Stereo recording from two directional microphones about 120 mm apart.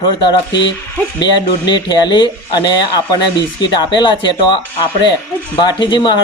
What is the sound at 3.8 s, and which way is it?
Speech, 40° left (ahead or behind).